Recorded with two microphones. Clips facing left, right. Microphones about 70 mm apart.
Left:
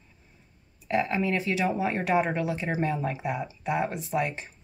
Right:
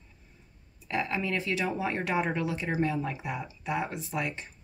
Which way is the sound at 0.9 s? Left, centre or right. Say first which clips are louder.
Left 4 dB; centre.